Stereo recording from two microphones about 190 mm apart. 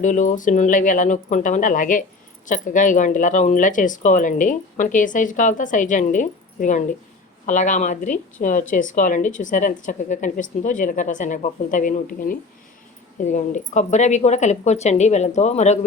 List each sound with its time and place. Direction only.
0.0 s speech: 40° left (ahead or behind)